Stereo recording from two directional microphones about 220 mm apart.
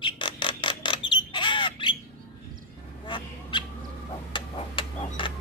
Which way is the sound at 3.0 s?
20° left (ahead or behind).